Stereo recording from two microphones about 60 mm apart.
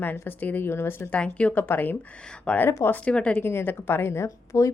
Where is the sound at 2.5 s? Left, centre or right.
Centre.